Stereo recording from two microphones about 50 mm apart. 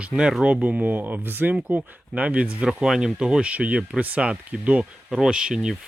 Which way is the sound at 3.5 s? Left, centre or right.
Right.